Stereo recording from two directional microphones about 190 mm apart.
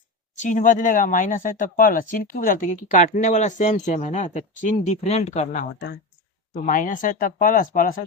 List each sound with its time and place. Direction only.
0.3 s speech: 40° left (ahead or behind)